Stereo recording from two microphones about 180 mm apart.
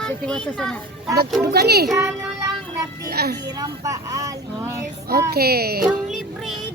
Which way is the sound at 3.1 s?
60° right (ahead or behind).